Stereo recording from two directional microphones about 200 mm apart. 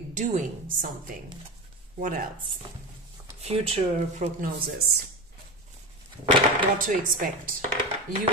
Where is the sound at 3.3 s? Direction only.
30° right (ahead or behind).